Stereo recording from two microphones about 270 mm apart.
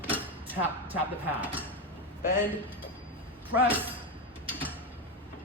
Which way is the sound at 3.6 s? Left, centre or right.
Centre.